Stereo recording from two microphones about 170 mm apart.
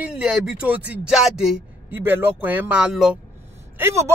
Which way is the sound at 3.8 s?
15° right (ahead or behind).